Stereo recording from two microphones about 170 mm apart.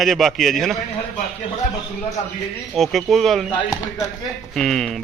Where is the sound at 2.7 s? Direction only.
Centre (ahead or behind).